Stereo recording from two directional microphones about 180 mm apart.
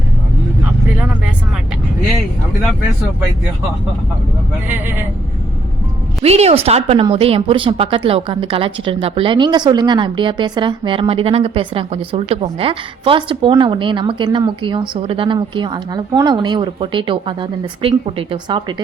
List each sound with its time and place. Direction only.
4.7 s speech: 10° right (ahead or behind)
6.2 s speech: 35° right (ahead or behind)